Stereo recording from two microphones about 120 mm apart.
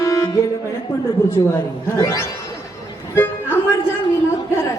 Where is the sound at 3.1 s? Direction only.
20° left (ahead or behind).